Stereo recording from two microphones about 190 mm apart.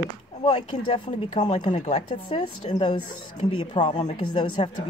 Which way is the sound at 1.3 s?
40° left (ahead or behind).